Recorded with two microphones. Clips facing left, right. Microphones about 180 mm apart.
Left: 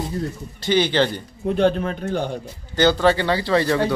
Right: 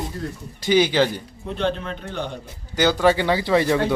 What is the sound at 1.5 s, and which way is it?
Speech, 45° left (ahead or behind).